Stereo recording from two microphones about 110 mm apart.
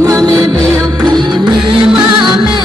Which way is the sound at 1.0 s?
45° right (ahead or behind).